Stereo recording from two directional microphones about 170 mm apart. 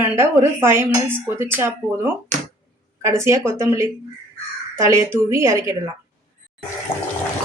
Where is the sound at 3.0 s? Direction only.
15° right (ahead or behind).